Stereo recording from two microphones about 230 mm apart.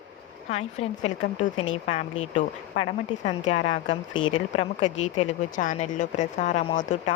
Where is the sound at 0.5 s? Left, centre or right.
Left.